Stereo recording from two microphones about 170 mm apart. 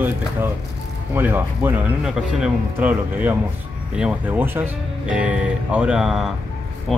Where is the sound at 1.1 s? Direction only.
15° right (ahead or behind).